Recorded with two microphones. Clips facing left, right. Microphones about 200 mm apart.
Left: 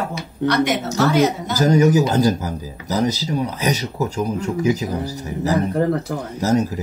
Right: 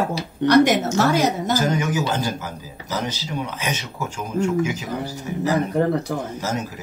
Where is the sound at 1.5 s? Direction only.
35° left (ahead or behind).